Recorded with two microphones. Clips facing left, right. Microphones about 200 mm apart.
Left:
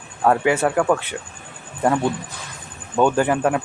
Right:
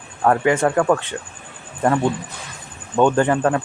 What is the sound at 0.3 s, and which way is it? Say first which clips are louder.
Speech: right 1 dB; 10° left (ahead or behind).